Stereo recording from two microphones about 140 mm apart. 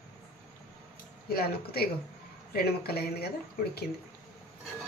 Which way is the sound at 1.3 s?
90° left.